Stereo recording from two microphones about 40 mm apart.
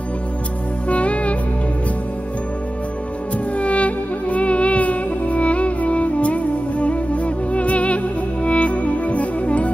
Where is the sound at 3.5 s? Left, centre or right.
Left.